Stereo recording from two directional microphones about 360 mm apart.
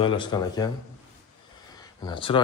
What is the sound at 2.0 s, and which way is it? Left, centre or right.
Speech, centre.